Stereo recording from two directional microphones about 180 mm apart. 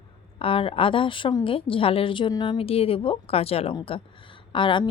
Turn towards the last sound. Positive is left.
turn(degrees=30)  # may be behind; listen again after turning